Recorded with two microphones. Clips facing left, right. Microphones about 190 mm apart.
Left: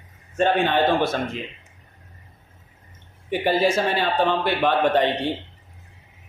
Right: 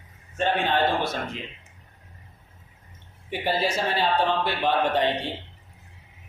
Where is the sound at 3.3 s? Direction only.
50° left (ahead or behind).